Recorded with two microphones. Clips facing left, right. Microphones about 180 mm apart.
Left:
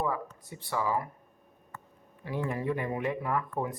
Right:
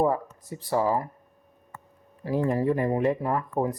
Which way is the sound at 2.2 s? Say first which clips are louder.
Right 7 dB; 35° right (ahead or behind).